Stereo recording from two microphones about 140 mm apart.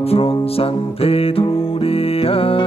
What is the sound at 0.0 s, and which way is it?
Music, 45° left (ahead or behind).